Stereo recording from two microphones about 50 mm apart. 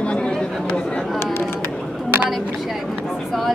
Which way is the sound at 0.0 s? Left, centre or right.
Left.